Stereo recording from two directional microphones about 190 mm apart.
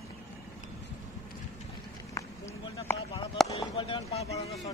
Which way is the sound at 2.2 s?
15° left (ahead or behind).